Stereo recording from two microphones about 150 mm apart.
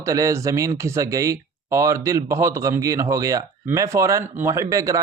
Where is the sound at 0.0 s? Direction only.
20° right (ahead or behind).